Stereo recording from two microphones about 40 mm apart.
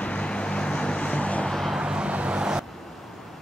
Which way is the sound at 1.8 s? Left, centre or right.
Right.